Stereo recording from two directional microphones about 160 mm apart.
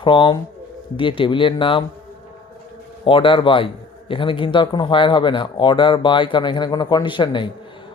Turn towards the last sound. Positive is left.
turn(degrees=30)  # may be behind; listen again after turning